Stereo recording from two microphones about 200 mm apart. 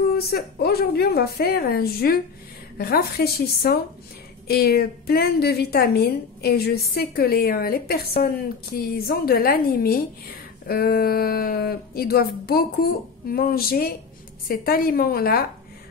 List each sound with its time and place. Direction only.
0.1 s a woman's voice: 50° left (ahead or behind)